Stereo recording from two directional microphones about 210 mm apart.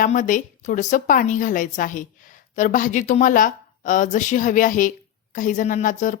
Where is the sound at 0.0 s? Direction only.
40° left (ahead or behind).